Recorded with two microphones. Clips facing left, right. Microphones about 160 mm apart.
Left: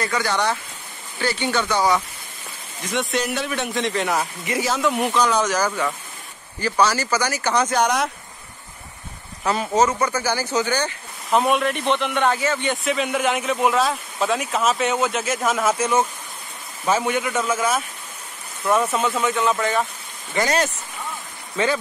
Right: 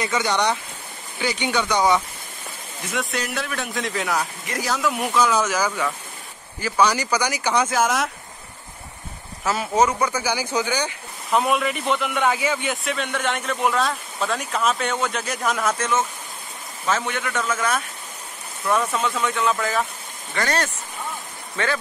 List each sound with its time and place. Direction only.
0.0 s speech: 20° right (ahead or behind)
2.8 s speech: centre (ahead or behind)
9.4 s speech: 5° right (ahead or behind)
11.2 s speech: centre (ahead or behind)
12.8 s speech: centre (ahead or behind)
20.3 s speech: 20° left (ahead or behind)